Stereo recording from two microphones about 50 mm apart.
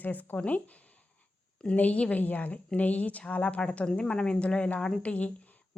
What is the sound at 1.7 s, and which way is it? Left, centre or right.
A woman's voice, left.